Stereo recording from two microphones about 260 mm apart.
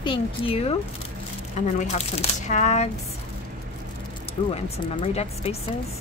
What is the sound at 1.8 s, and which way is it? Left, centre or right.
A woman's voice, left.